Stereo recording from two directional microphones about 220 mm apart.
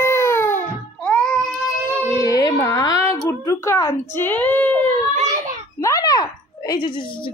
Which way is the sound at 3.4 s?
15° left (ahead or behind).